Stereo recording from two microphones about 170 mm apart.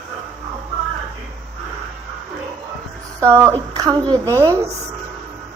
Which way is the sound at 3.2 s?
15° right (ahead or behind).